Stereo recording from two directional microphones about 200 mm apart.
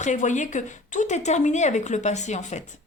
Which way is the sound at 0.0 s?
40° left (ahead or behind).